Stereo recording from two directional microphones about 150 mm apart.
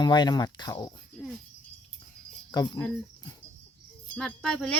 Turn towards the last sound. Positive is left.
turn(degrees=5)  # may be behind; listen again after turning